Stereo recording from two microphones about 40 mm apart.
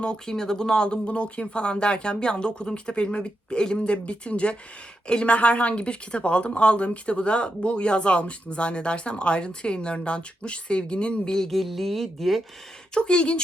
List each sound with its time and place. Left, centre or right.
0.0 s speech: centre
11.3 s a sound: centre
11.6 s speech: centre
12.9 s speech: left